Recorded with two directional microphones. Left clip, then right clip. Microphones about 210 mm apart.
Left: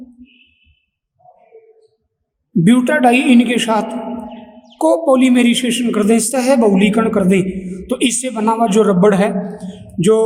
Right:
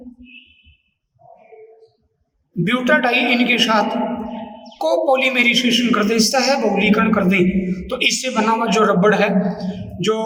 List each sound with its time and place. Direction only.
2.6 s a man's voice: 40° left (ahead or behind)